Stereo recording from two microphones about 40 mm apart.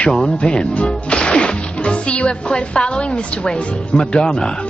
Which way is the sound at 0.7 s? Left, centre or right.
Left.